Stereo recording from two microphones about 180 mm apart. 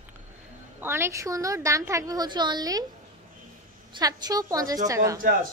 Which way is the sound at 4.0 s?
20° right (ahead or behind).